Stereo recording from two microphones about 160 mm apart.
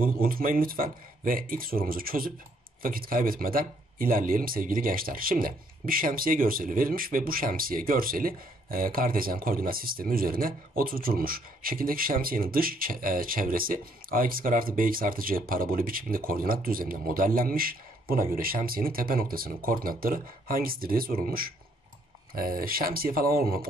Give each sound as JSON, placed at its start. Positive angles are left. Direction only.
{"t": 0.0, "sound": "a man's voice", "side_deg": -65}